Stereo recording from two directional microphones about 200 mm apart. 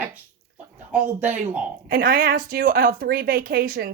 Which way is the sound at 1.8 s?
45° right (ahead or behind).